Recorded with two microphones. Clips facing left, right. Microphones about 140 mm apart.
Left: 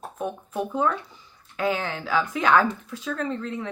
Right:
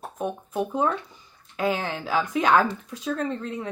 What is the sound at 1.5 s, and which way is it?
Speech, 35° right (ahead or behind).